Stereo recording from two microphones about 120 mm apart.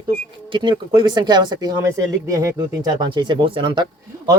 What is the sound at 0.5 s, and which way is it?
Speech, 40° right (ahead or behind).